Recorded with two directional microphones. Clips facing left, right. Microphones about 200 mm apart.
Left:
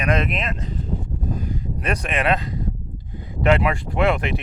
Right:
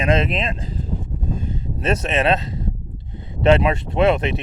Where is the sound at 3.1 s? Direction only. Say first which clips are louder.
Right 3 dB; 25° right (ahead or behind).